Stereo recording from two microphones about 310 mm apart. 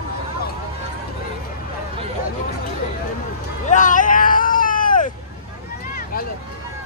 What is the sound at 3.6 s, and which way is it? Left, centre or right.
Hubbub, left.